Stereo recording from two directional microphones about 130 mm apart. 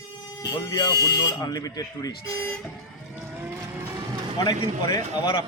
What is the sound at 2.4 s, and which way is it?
Vehicle, 10° left (ahead or behind).